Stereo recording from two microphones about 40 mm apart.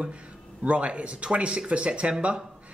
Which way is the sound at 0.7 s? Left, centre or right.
Right.